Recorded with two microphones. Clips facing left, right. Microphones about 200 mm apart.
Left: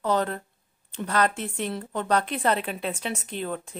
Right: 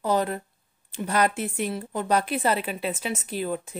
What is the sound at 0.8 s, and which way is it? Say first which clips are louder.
Speech: right 1 dB; 10° right (ahead or behind).